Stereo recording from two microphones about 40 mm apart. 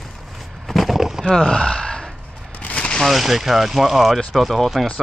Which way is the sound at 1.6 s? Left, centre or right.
Left.